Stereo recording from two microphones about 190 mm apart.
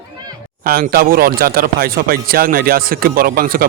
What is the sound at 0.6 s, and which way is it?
Speech, 50° right (ahead or behind).